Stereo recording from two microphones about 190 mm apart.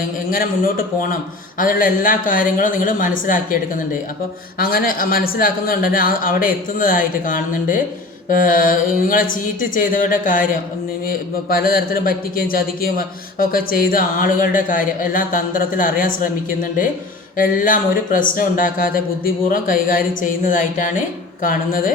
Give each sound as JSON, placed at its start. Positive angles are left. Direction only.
{"t": 0.3, "sound": "speech", "side_deg": 50}
{"t": 17.3, "sound": "speech", "side_deg": 45}